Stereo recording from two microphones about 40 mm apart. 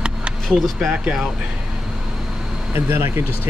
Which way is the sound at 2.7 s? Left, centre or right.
Right.